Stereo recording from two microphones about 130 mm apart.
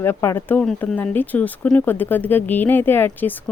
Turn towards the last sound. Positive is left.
turn(degrees=15)  # may be behind; listen again after turning